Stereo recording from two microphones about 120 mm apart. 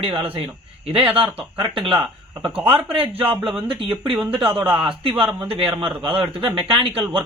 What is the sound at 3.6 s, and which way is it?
Speech, 45° right (ahead or behind).